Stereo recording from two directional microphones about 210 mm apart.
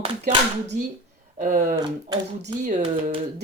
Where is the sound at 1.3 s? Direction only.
40° right (ahead or behind).